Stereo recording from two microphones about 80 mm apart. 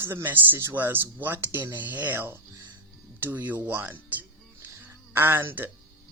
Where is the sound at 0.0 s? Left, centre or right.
Right.